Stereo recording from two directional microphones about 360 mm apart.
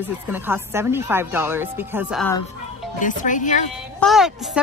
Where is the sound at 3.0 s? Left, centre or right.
Left.